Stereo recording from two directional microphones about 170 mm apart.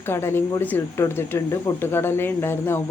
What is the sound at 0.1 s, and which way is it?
Speech, 15° left (ahead or behind).